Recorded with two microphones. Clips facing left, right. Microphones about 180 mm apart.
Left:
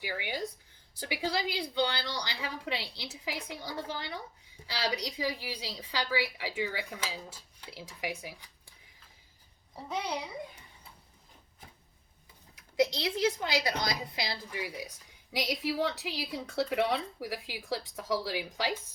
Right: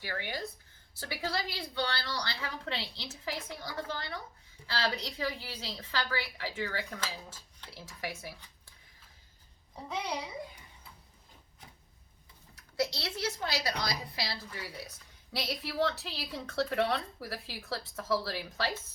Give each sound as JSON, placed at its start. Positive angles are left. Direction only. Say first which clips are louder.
{"t": 0.0, "sound": "a woman's voice", "louder": "left 2 dB", "side_deg": 15}
{"t": 12.5, "sound": "a woman's voice", "louder": "left 5 dB", "side_deg": 15}